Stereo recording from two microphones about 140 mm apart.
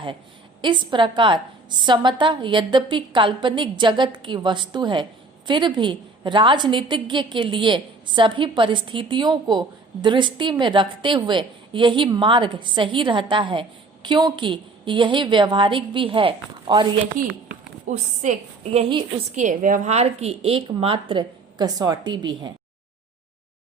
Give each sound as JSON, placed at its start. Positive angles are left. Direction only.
{"t": 0.6, "sound": "a woman's voice", "side_deg": -35}
{"t": 17.2, "sound": "a woman's voice", "side_deg": -70}
{"t": 18.9, "sound": "a woman's voice", "side_deg": -35}
{"t": 19.3, "sound": "a woman's voice", "side_deg": -65}